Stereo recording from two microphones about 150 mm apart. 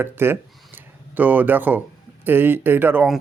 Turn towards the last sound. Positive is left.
turn(degrees=-15)  # may be behind; listen again after turning